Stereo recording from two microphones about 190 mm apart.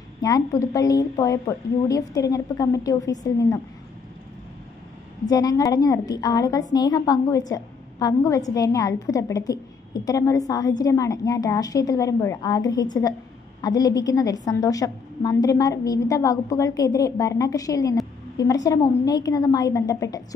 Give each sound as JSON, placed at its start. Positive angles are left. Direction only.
{"t": 0.2, "sound": "a woman's voice", "side_deg": 15}
{"t": 5.3, "sound": "a woman's voice", "side_deg": 20}